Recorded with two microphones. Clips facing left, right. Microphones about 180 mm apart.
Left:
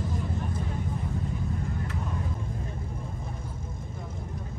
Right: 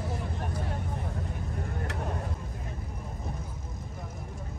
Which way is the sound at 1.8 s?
70° right (ahead or behind).